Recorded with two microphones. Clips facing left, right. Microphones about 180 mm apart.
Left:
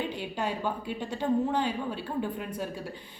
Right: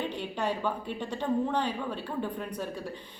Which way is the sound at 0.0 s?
10° left (ahead or behind).